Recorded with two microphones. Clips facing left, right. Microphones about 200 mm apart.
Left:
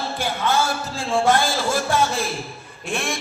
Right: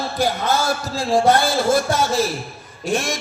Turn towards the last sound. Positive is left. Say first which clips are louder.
# right 5 dB
turn(degrees=-40)  # may be behind; listen again after turning